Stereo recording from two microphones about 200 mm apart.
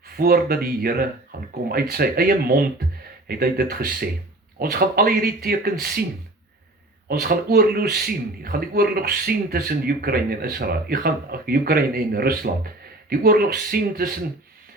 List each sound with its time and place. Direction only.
0.2 s speech: 50° right (ahead or behind)
7.1 s speech: 50° right (ahead or behind)